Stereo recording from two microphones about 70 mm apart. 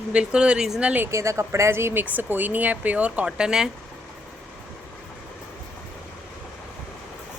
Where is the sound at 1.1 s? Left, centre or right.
Right; by 3.7 s centre.